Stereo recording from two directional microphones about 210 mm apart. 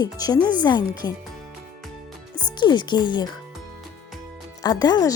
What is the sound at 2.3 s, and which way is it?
Speech, 20° left (ahead or behind).